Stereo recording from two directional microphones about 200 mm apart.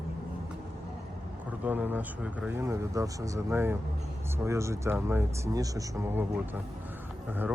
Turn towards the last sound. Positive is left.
turn(degrees=-10)  # may be behind; listen again after turning